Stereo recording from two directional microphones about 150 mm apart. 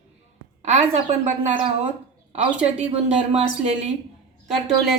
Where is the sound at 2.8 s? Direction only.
50° right (ahead or behind).